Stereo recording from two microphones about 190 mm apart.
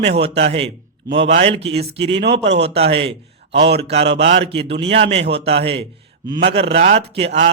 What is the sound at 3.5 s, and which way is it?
Speech, 65° right (ahead or behind).